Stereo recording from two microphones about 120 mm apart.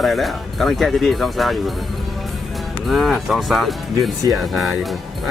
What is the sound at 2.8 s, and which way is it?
Speech, centre (ahead or behind).